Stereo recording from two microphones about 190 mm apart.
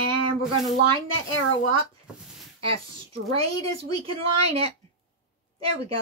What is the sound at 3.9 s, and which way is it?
Speech, 30° right (ahead or behind).